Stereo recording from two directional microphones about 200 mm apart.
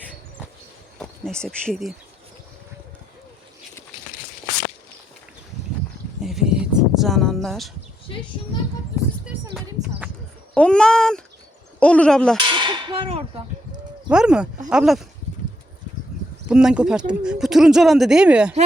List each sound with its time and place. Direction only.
0.9 s speech: 5° left (ahead or behind)
6.2 s a sound: 5° right (ahead or behind)
10.5 s speech: 5° left (ahead or behind)
12.4 s a sound: 25° right (ahead or behind)
14.1 s speech: 5° right (ahead or behind)
16.5 s speech: 5° right (ahead or behind)